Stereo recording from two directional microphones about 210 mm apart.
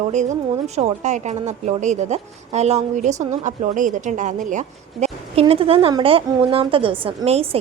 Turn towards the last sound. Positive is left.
turn(degrees=-30)  # may be behind; listen again after turning